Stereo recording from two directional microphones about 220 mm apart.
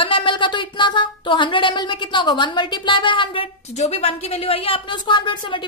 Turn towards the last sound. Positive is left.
turn(degrees=20)  # may be behind; listen again after turning